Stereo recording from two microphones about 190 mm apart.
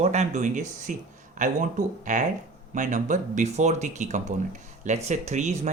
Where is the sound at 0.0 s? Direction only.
35° right (ahead or behind).